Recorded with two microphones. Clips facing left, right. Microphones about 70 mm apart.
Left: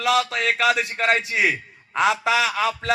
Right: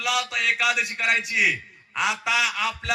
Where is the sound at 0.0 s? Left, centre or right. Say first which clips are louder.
Left 5 dB; left.